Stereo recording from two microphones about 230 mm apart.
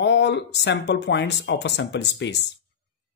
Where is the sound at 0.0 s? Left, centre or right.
Left.